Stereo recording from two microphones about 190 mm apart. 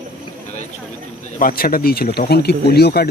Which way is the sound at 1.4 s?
50° left (ahead or behind).